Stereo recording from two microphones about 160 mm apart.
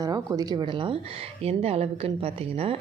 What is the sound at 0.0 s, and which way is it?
Speech, 20° right (ahead or behind).